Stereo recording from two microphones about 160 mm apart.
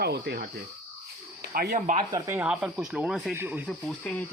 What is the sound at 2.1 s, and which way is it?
Speech, 20° right (ahead or behind).